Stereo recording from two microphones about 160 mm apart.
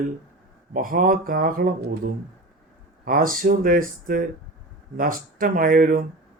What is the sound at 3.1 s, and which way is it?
Speech, 60° right (ahead or behind).